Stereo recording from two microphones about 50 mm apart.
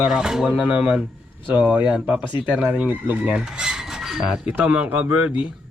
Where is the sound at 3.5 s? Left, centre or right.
Centre.